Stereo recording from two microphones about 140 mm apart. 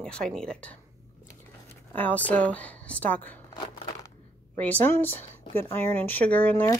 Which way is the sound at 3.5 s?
30° left (ahead or behind).